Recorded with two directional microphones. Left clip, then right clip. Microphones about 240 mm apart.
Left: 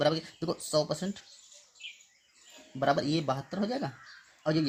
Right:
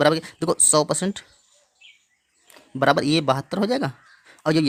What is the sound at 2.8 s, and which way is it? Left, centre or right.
Speech, right.